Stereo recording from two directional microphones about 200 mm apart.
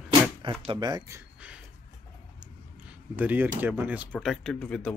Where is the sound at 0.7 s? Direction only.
20° right (ahead or behind).